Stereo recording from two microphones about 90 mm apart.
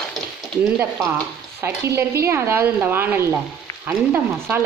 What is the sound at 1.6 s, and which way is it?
Speech, 30° right (ahead or behind).